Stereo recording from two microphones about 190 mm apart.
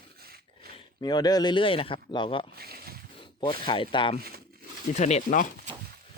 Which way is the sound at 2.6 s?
55° right (ahead or behind).